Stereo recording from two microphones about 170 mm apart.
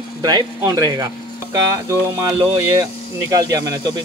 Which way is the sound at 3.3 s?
20° right (ahead or behind).